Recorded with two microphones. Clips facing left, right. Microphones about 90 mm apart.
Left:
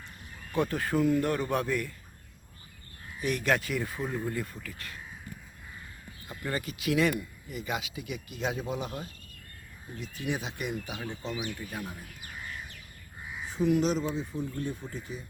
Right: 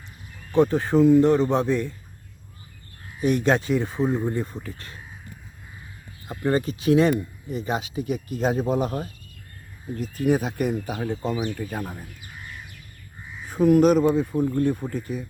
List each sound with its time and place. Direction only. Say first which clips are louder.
0.5 s speech: right 9 dB; 20° right (ahead or behind)
3.2 s speech: right 7 dB; 30° right (ahead or behind)
6.2 s speech: right 11 dB; 35° right (ahead or behind)
10.2 s speech: right 12 dB; 45° right (ahead or behind)
13.5 s speech: right 10 dB; 50° right (ahead or behind)